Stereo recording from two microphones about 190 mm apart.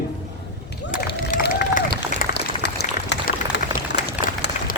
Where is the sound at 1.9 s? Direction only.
60° left (ahead or behind).